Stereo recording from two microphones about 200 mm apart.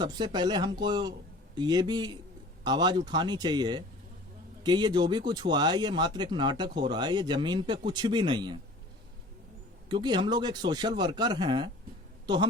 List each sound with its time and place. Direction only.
0.0 s speech: 20° right (ahead or behind)
9.9 s a woman's voice: 20° right (ahead or behind)